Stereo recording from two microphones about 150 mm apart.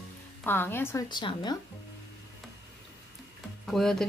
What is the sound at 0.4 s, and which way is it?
Speech, 15° left (ahead or behind).